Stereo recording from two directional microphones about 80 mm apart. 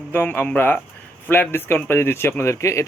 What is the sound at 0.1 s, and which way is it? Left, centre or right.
Speech, left.